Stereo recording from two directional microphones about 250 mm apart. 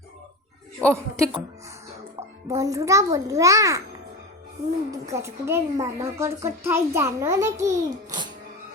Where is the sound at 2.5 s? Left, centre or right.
Centre.